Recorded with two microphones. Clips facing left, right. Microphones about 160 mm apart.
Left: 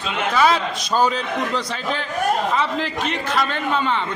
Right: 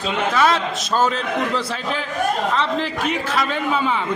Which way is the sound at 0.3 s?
Centre (ahead or behind).